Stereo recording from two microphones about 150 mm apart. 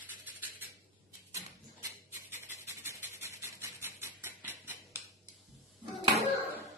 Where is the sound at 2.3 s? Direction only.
20° right (ahead or behind).